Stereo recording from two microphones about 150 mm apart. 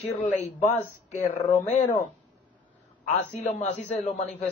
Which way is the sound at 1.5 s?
45° left (ahead or behind).